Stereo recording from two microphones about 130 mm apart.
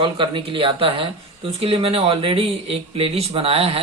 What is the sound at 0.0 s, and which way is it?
Speech, 40° right (ahead or behind).